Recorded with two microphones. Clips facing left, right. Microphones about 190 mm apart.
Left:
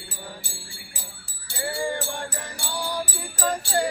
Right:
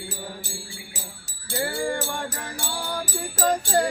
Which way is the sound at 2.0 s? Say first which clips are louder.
Right 2 dB; 45° right (ahead or behind).